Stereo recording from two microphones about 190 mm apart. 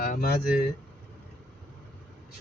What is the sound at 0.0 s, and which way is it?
Speech, 50° left (ahead or behind).